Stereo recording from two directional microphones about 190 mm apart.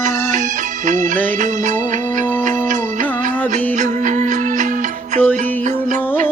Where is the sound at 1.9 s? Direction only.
40° right (ahead or behind).